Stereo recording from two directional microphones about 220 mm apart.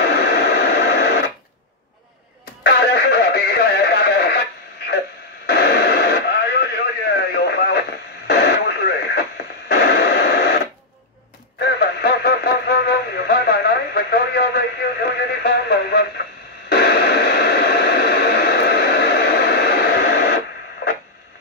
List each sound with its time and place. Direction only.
0.0 s radio: 50° left (ahead or behind)
2.6 s music: 45° left (ahead or behind)
5.5 s radio: 45° left (ahead or behind)
11.6 s radio: 45° left (ahead or behind)